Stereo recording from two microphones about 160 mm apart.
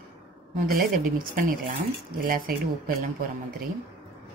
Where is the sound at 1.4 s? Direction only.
55° right (ahead or behind).